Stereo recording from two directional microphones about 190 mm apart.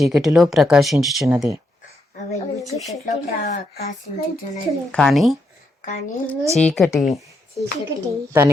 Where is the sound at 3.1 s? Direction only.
40° left (ahead or behind).